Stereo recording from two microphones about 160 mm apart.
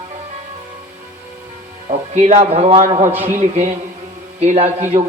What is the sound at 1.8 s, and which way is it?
A man's voice, 45° right (ahead or behind).